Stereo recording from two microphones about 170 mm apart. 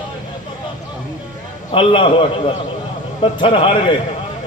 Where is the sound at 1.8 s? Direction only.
30° left (ahead or behind).